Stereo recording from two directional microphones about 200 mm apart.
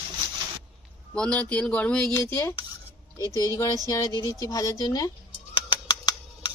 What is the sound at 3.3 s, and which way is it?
Speech, 20° right (ahead or behind).